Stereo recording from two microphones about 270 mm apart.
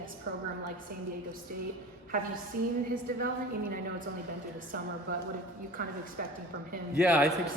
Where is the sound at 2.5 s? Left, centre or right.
Right.